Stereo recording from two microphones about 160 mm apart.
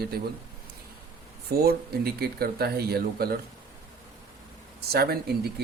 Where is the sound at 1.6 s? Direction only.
75° right (ahead or behind).